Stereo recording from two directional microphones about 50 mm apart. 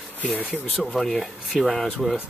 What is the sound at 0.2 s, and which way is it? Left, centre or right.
Speech, left.